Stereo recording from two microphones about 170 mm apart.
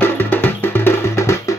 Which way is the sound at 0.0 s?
10° left (ahead or behind).